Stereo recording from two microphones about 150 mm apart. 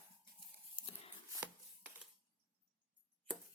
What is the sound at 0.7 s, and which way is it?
Whispering, 35° left (ahead or behind).